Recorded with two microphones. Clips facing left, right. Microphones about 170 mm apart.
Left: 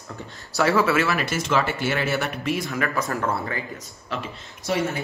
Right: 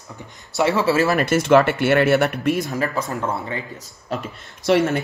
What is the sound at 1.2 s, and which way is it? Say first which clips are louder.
Speech: right 8 dB; 55° right (ahead or behind).